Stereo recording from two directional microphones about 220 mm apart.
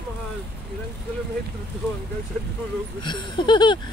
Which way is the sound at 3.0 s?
20° left (ahead or behind).